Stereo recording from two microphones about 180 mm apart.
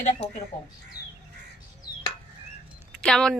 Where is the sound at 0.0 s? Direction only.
35° left (ahead or behind).